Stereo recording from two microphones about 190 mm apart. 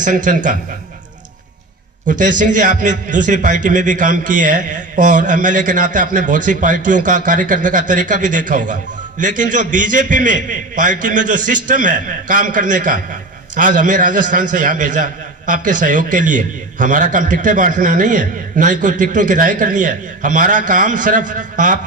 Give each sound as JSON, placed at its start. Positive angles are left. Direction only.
{"t": 0.0, "sound": "a man's voice", "side_deg": -40}
{"t": 2.0, "sound": "a man's voice", "side_deg": -40}